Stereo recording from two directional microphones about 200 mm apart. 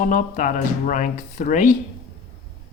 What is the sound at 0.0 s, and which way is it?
Speech, 40° left (ahead or behind).